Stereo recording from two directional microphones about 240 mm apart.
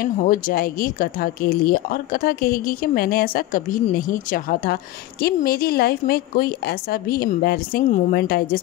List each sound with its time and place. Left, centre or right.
0.0 s speech: left